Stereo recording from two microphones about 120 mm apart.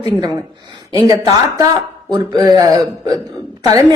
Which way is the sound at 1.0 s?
30° right (ahead or behind).